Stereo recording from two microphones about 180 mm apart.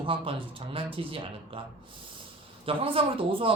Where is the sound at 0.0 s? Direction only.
30° right (ahead or behind).